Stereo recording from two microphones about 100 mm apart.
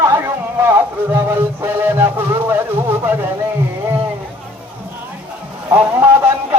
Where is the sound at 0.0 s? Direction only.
25° right (ahead or behind).